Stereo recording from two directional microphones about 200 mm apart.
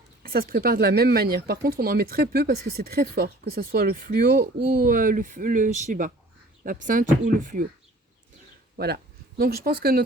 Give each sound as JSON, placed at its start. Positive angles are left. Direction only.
{"t": 0.2, "sound": "speech", "side_deg": -50}
{"t": 8.8, "sound": "speech", "side_deg": -50}